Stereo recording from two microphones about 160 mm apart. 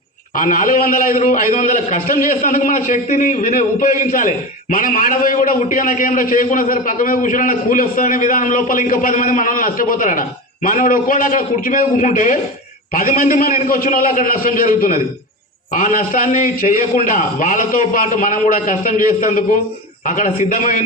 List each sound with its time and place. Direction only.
0.3 s a man's voice: 55° left (ahead or behind)